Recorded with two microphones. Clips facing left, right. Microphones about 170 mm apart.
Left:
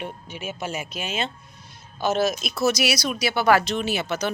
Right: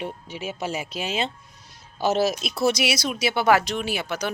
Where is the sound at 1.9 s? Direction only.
35° right (ahead or behind); by 4.3 s 10° right (ahead or behind).